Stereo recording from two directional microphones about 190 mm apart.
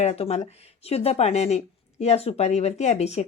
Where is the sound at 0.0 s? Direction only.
35° left (ahead or behind).